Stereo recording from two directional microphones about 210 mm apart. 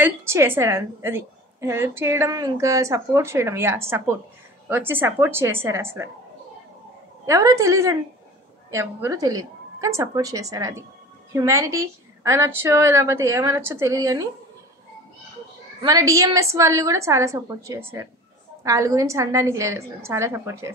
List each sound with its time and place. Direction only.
0.0 s a woman's voice: 10° right (ahead or behind)
7.2 s a woman's voice: 15° right (ahead or behind)
15.8 s a woman's voice: 15° right (ahead or behind)